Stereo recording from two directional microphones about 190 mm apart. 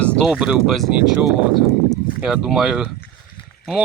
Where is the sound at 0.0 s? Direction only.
5° left (ahead or behind).